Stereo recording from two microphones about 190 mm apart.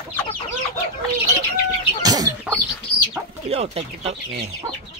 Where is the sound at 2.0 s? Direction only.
20° right (ahead or behind).